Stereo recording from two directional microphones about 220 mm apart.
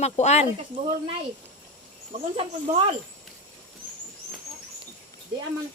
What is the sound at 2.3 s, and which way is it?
Speech, 25° right (ahead or behind).